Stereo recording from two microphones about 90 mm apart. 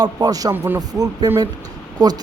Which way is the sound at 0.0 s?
45° right (ahead or behind).